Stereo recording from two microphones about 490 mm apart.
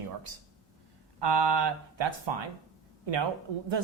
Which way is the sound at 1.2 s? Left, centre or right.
Right.